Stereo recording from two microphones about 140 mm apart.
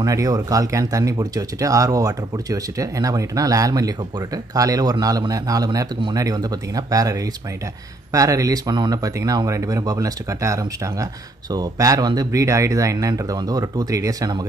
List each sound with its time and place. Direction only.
0.0 s speech: 25° right (ahead or behind)